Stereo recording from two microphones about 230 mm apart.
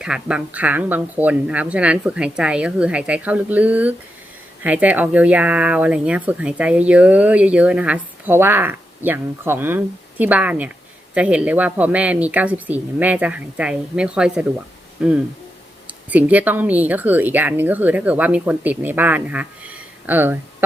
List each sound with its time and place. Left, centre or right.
0.0 s speech: centre